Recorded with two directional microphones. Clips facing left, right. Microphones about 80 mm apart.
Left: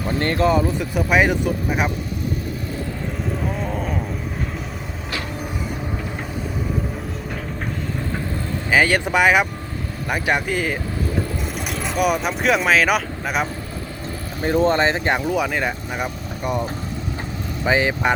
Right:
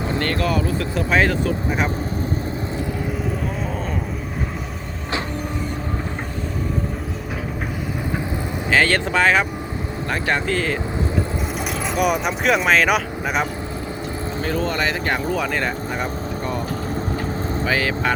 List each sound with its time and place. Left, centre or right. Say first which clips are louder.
0.2 s speech: left 5 dB; left
3.6 s vehicle: left 1 dB; centre
8.7 s speech: left 1 dB; centre
11.9 s speech: even; centre
14.4 s speech: left 6 dB; left
15.3 s speech: left 1 dB; centre
17.7 s speech: left 4 dB; left